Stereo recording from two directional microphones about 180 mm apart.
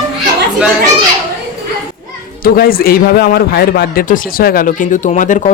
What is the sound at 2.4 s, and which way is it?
A man's voice, 55° left (ahead or behind).